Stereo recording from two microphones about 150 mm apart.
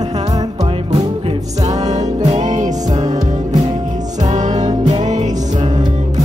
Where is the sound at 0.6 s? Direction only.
35° right (ahead or behind).